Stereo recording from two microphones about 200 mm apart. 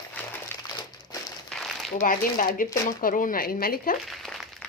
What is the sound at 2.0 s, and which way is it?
Speech, 40° left (ahead or behind).